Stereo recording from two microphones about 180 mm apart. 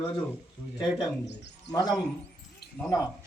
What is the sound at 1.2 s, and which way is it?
Speech, 70° left (ahead or behind).